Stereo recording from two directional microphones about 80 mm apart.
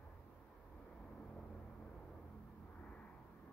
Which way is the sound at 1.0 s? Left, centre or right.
Centre.